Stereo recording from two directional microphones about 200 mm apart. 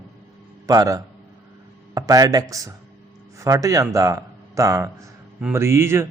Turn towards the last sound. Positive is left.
turn(degrees=-10)  # may be behind; listen again after turning